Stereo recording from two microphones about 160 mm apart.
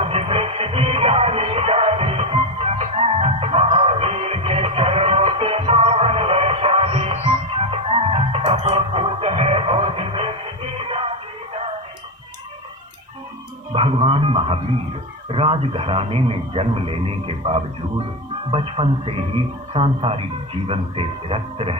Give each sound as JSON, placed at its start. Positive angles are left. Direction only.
{"t": 0.0, "sound": "music", "side_deg": -40}
{"t": 13.7, "sound": "speech", "side_deg": -35}
{"t": 18.5, "sound": "speech", "side_deg": -35}